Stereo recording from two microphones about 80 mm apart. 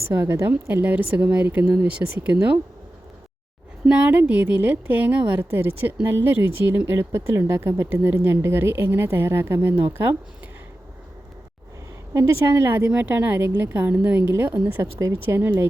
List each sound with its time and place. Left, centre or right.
0.2 s a woman's voice: right
3.8 s a woman's voice: centre
12.1 s a woman's voice: right
14.7 s speech: right
15.4 s a woman's voice: right